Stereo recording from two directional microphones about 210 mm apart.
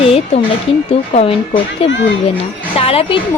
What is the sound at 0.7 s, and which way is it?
A woman's voice, 25° left (ahead or behind).